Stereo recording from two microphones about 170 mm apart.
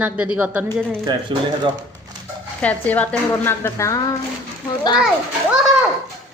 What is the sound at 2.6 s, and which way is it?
A woman's voice, 10° left (ahead or behind).